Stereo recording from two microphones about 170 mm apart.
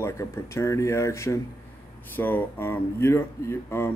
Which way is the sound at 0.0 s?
15° left (ahead or behind).